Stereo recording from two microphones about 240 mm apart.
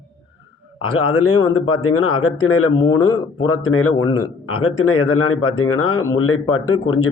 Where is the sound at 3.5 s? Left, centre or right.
Left.